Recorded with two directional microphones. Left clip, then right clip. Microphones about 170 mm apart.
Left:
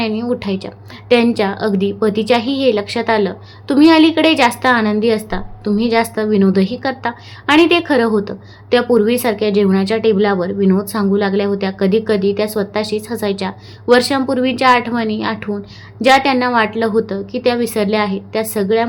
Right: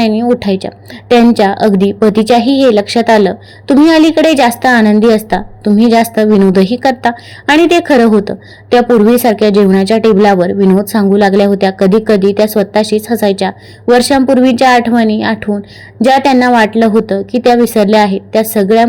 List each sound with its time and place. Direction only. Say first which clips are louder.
0.0 s a woman's voice: right 8 dB; 30° right (ahead or behind)